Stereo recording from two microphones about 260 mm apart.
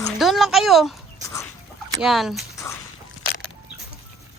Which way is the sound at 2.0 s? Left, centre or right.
Centre.